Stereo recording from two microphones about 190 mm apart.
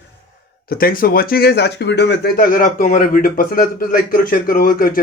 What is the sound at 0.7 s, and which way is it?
Speech, 50° left (ahead or behind).